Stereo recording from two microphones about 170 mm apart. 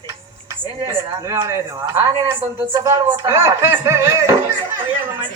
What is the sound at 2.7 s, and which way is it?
Speech, 25° right (ahead or behind).